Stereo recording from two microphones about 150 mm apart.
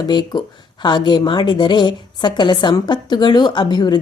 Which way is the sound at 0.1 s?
30° left (ahead or behind).